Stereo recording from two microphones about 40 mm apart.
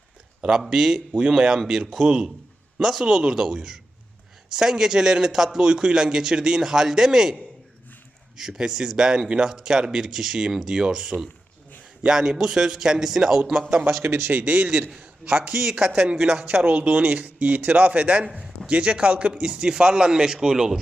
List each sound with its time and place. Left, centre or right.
0.6 s a man's voice: centre
0.9 s a man's voice: right
1.3 s a man's voice: centre
14.0 s a man's voice: right
14.3 s a man's voice: right
14.9 s a man's voice: right
16.6 s a man's voice: right; by 20.7 s centre